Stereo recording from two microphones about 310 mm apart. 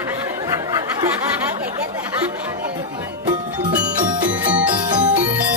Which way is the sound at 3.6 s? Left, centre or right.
Centre.